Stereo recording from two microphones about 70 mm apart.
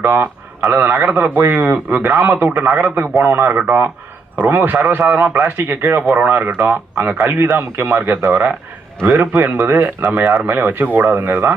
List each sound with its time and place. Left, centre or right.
0.0 s speech: right